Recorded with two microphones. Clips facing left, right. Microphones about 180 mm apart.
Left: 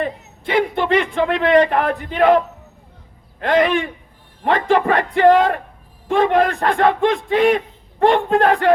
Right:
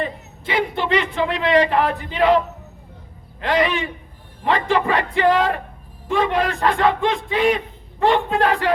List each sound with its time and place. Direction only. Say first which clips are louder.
0.0 s a man's voice: left 3 dB; 50° left (ahead or behind)
3.4 s a man's voice: left 4 dB; 50° left (ahead or behind)